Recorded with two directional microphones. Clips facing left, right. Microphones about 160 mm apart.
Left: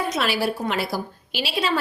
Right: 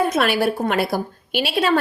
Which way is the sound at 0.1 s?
55° right (ahead or behind).